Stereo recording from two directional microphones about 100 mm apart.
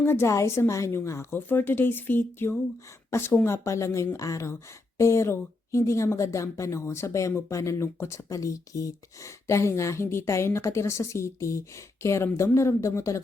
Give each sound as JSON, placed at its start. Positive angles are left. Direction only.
{"t": 0.0, "sound": "speech", "side_deg": 25}